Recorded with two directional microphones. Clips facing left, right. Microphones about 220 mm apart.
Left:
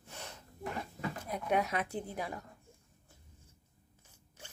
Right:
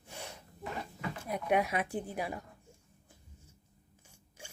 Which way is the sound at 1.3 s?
10° right (ahead or behind).